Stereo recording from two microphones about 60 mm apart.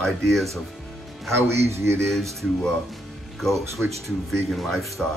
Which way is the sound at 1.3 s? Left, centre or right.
Right.